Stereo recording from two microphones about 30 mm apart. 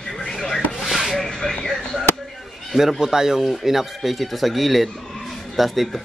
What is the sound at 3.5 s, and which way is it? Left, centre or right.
Speech, centre.